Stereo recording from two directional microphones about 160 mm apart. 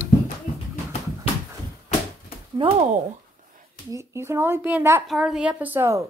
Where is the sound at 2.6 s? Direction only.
35° right (ahead or behind).